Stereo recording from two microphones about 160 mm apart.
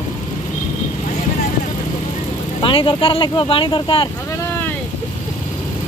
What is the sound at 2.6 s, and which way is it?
Speech, 35° left (ahead or behind).